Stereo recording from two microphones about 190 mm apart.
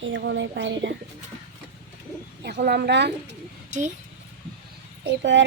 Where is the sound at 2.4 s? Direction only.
60° right (ahead or behind).